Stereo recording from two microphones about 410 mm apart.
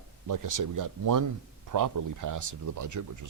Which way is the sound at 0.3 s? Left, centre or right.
Right.